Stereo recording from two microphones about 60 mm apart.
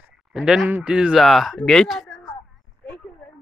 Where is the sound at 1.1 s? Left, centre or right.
Centre.